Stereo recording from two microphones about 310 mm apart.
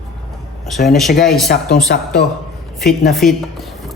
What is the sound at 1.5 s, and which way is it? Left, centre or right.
Speech, left.